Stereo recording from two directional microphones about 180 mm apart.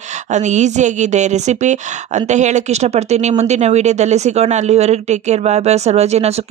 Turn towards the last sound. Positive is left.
turn(degrees=-35)  # may be behind; listen again after turning